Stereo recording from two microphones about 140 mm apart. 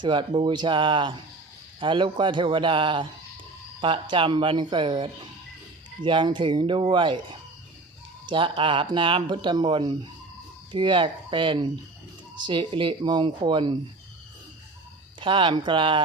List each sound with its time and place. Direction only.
0.0 s speech: 35° right (ahead or behind)
15.2 s speech: 35° right (ahead or behind)